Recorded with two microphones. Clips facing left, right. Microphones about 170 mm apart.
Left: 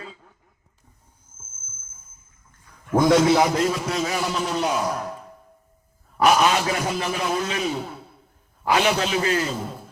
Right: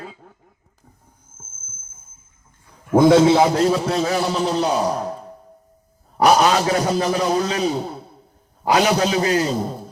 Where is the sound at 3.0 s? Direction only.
25° right (ahead or behind).